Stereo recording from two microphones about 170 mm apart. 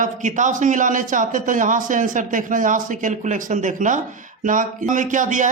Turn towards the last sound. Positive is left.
turn(degrees=-50)  # may be behind; listen again after turning